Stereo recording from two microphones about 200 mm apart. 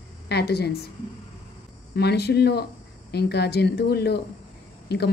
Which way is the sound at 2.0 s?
55° left (ahead or behind).